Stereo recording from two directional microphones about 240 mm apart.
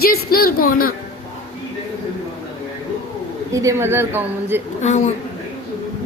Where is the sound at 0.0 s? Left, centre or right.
Left.